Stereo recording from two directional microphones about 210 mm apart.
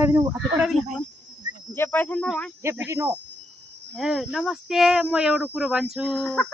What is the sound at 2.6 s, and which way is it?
Speech, 15° right (ahead or behind).